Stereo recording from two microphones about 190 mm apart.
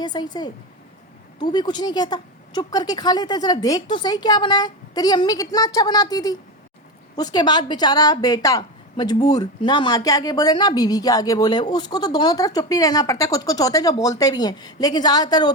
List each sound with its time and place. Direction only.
0.0 s a woman's voice: 20° left (ahead or behind)